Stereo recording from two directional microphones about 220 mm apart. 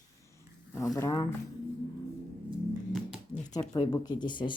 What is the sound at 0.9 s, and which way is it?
Speech, 15° left (ahead or behind).